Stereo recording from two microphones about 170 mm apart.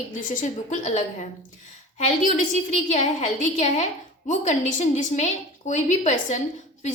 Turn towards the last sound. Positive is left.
turn(degrees=45)  # may be behind; listen again after turning